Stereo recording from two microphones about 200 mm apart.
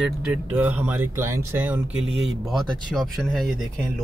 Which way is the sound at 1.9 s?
70° right (ahead or behind).